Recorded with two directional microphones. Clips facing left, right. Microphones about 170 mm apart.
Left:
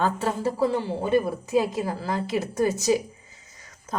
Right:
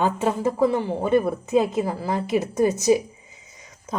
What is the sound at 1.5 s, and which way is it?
Speech, 20° right (ahead or behind).